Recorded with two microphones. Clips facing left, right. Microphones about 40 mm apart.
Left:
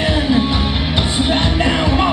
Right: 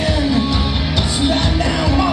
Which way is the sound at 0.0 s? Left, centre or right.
Left.